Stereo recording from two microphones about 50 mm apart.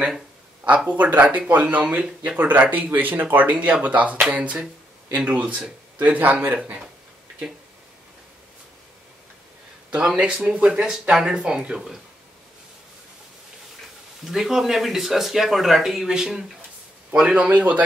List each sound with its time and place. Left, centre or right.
0.8 s speech: right
3.4 s speech: right
10.1 s speech: centre
10.8 s speech: centre
14.2 s speech: centre
17.4 s speech: right